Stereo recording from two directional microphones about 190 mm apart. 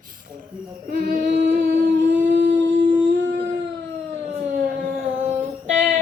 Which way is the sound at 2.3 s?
70° right (ahead or behind).